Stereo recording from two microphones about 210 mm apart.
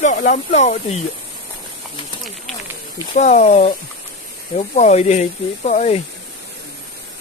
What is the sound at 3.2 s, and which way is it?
Speech, 35° left (ahead or behind).